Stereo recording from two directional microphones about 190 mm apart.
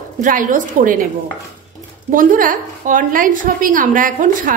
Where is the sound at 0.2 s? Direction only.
45° right (ahead or behind).